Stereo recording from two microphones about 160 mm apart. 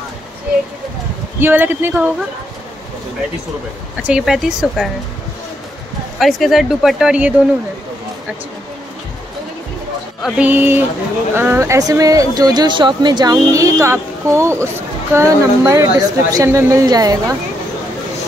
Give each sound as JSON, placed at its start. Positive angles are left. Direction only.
{"t": 1.4, "sound": "speech", "side_deg": -10}
{"t": 4.0, "sound": "speech", "side_deg": -5}
{"t": 6.1, "sound": "speech", "side_deg": 0}
{"t": 10.2, "sound": "speech", "side_deg": -5}